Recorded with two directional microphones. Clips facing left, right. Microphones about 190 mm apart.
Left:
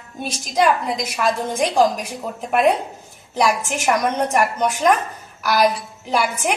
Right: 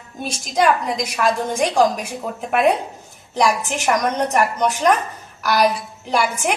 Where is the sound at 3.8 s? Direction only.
5° left (ahead or behind).